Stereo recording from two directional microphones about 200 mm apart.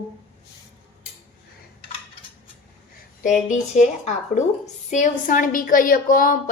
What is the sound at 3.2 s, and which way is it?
A woman's voice, 40° left (ahead or behind).